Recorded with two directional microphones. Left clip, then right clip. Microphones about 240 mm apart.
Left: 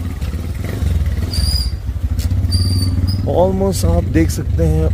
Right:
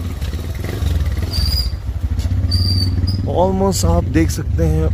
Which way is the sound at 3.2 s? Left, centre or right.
Centre.